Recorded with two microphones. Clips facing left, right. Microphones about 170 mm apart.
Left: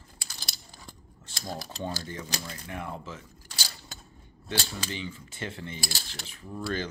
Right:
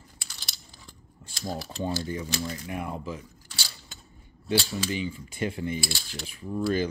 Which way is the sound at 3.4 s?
40° left (ahead or behind).